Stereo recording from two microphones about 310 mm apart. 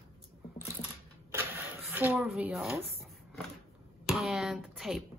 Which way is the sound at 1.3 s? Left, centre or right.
Centre.